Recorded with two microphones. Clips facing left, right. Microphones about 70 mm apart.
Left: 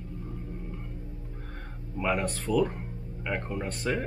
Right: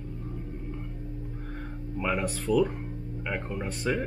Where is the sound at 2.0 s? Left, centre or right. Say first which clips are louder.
Left 1 dB; centre.